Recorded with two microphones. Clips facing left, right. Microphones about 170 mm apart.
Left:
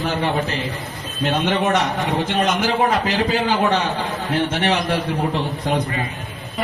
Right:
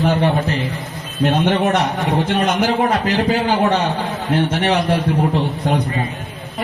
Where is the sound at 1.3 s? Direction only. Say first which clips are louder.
Right 2 dB; 60° right (ahead or behind).